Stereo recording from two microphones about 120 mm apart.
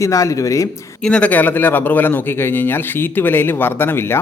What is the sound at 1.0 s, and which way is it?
Speech, 10° left (ahead or behind).